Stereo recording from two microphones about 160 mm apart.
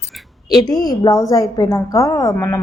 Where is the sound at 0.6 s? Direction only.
25° left (ahead or behind).